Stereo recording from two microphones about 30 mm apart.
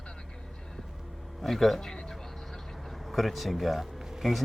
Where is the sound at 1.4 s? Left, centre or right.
Centre.